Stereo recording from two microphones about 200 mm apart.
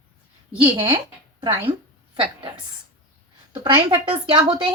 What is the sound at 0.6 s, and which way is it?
Speech, 25° right (ahead or behind).